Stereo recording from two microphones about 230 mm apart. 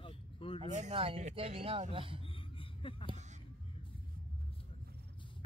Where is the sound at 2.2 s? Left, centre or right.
Left.